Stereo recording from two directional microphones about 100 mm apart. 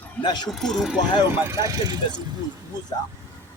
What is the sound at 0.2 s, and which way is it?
Speech, 45° left (ahead or behind).